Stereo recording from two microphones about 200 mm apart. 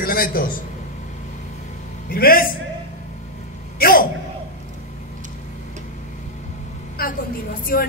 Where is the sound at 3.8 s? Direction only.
45° left (ahead or behind).